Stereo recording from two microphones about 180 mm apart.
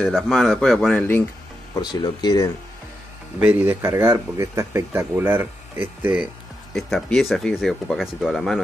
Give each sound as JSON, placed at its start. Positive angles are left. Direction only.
{"t": 0.0, "sound": "speech", "side_deg": 0}
{"t": 1.8, "sound": "speech", "side_deg": 25}
{"t": 3.3, "sound": "speech", "side_deg": -10}
{"t": 6.7, "sound": "speech", "side_deg": 0}